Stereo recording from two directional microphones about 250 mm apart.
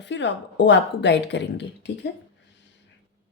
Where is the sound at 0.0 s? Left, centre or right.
Left.